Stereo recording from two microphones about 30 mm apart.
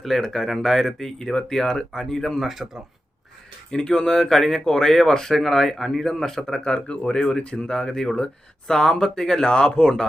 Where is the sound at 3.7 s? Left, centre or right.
Left.